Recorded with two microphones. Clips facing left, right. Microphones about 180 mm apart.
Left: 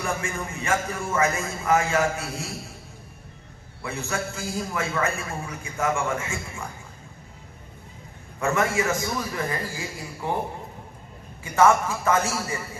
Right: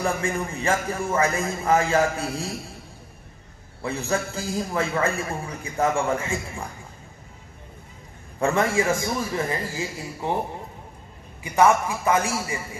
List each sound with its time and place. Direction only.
0.0 s a man's voice: 35° right (ahead or behind)
3.8 s a man's voice: 35° right (ahead or behind)
8.4 s a man's voice: 30° right (ahead or behind)
11.4 s a man's voice: 15° right (ahead or behind)